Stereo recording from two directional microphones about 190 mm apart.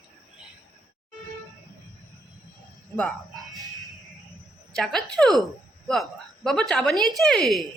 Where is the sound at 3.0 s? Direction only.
Centre (ahead or behind).